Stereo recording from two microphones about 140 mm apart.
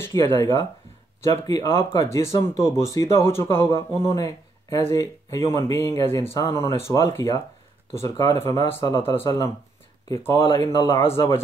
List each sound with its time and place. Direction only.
0.0 s speech: 20° left (ahead or behind)